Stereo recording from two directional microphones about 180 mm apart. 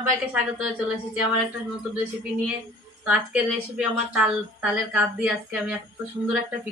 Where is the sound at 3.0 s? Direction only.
5° right (ahead or behind).